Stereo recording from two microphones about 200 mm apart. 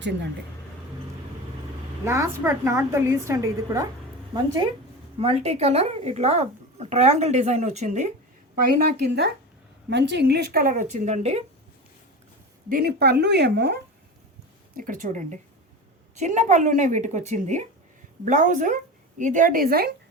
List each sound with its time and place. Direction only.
0.0 s a woman's voice: 60° right (ahead or behind)
2.0 s a woman's voice: 15° right (ahead or behind)
5.2 s a woman's voice: 30° right (ahead or behind)
12.6 s a woman's voice: 50° right (ahead or behind)
14.8 s a woman's voice: 40° right (ahead or behind)